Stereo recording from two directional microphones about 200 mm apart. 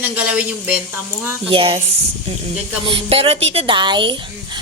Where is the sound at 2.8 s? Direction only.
25° right (ahead or behind).